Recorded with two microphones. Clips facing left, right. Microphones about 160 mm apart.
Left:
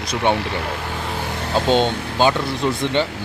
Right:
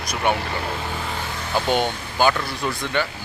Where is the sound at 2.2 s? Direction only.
25° left (ahead or behind).